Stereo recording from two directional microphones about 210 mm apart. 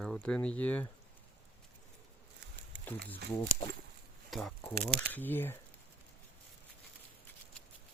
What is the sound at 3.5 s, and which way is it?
Speech, 40° right (ahead or behind).